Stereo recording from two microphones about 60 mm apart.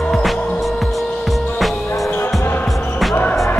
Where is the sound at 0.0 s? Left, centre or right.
Centre.